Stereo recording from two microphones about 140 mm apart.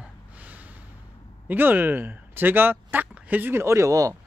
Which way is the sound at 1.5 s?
15° right (ahead or behind).